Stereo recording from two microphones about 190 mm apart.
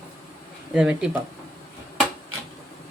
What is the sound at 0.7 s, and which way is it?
Speech, 5° right (ahead or behind).